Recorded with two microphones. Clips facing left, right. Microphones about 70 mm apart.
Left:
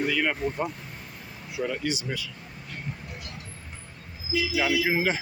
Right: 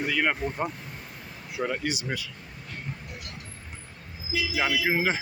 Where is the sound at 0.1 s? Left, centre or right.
Right.